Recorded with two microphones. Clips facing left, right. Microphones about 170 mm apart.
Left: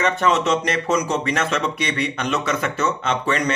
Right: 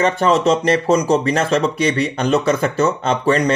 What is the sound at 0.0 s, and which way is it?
Speech, 35° right (ahead or behind).